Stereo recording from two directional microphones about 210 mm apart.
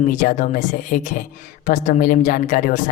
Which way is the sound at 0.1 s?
35° left (ahead or behind).